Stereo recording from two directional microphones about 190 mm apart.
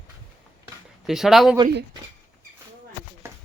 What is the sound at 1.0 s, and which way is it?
Speech, centre (ahead or behind).